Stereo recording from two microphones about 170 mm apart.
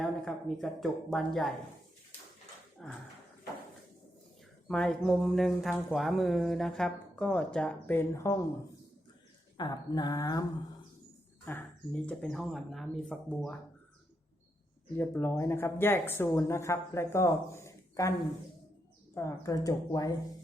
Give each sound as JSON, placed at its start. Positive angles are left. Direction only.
{"t": 0.0, "sound": "speech", "side_deg": 0}
{"t": 2.8, "sound": "speech", "side_deg": 5}
{"t": 4.7, "sound": "speech", "side_deg": 5}
{"t": 9.6, "sound": "speech", "side_deg": 25}
{"t": 11.4, "sound": "speech", "side_deg": 10}
{"t": 14.9, "sound": "speech", "side_deg": 10}
{"t": 17.5, "sound": "a sound", "side_deg": 15}
{"t": 19.1, "sound": "speech", "side_deg": 20}